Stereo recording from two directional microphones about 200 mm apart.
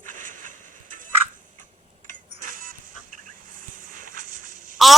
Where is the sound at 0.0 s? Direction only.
40° right (ahead or behind).